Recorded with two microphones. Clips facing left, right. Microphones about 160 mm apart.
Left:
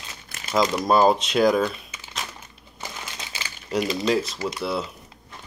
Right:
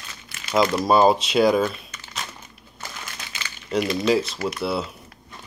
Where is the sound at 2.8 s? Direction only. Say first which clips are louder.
Left 1 dB; 20° left (ahead or behind).